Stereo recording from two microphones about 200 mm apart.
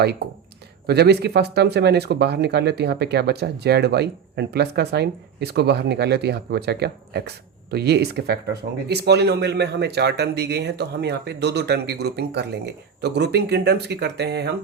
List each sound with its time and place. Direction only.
0.9 s speech: 55° right (ahead or behind)